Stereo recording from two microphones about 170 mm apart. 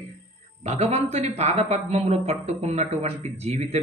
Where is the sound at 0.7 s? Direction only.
40° right (ahead or behind).